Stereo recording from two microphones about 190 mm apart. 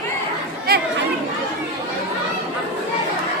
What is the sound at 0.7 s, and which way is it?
Chatter, 55° right (ahead or behind).